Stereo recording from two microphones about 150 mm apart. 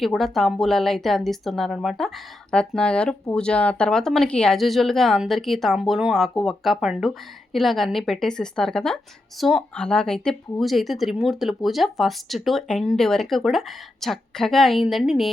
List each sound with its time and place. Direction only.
0.0 s speech: centre (ahead or behind)